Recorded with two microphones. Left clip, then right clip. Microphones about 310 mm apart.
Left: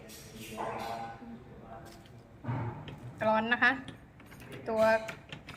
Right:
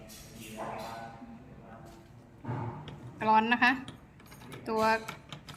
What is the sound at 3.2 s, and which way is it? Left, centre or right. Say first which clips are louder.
A woman's voice: right 2 dB; centre.